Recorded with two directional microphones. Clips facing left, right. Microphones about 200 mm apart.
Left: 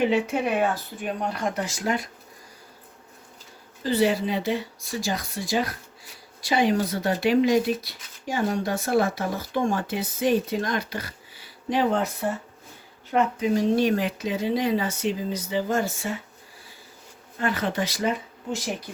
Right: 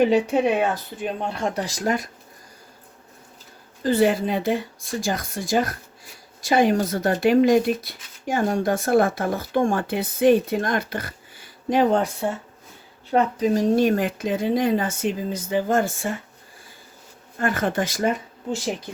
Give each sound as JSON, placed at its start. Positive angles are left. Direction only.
{"t": 0.1, "sound": "speech", "side_deg": -35}
{"t": 3.8, "sound": "speech", "side_deg": -50}
{"t": 13.1, "sound": "speech", "side_deg": -35}
{"t": 17.3, "sound": "speech", "side_deg": -45}